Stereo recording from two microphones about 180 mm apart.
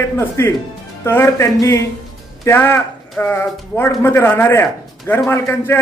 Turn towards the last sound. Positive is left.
turn(degrees=15)  # may be behind; listen again after turning